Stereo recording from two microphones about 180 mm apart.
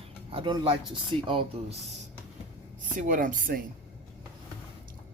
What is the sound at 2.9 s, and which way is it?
Speech, 50° right (ahead or behind).